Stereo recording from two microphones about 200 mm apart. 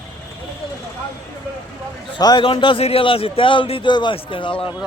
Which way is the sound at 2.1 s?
20° left (ahead or behind).